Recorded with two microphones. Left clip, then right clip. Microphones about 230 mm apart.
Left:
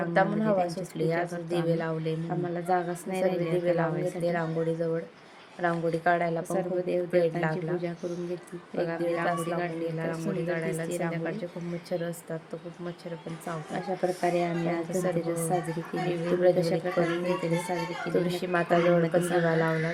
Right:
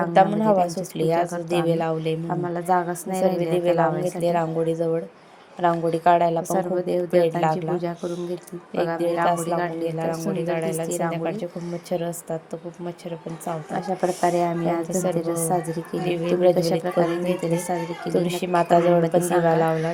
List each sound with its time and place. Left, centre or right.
0.1 s a woman's voice: centre
2.3 s a woman's voice: centre
10.6 s a woman's voice: centre
13.7 s a woman's voice: centre
14.3 s a woman's voice: centre